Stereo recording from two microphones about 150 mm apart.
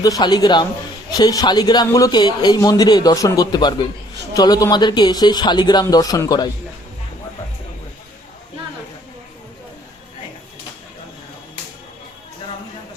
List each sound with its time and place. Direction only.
0.0 s a man's voice: 25° left (ahead or behind)